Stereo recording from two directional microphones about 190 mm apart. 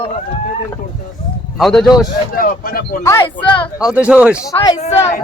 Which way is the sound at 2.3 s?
50° left (ahead or behind).